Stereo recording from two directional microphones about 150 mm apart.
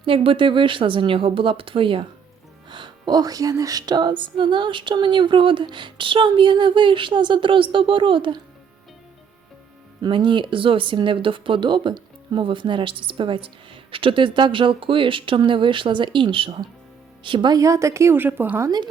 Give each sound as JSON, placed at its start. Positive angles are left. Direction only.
{"t": 0.0, "sound": "speech", "side_deg": -35}
{"t": 10.0, "sound": "a woman's voice", "side_deg": -30}